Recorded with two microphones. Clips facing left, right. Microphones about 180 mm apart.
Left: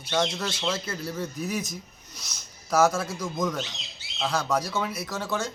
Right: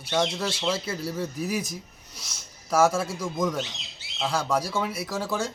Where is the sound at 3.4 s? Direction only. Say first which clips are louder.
Right 2 dB; 10° right (ahead or behind).